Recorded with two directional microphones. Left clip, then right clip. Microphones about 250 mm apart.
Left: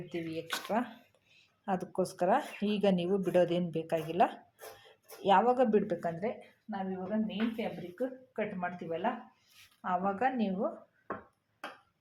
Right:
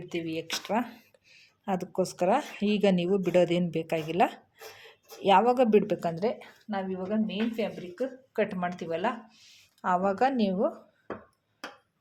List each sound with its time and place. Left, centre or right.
0.1 s speech: right